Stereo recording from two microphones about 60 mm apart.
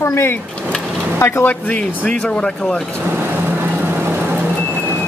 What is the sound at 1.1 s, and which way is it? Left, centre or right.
Speech, left.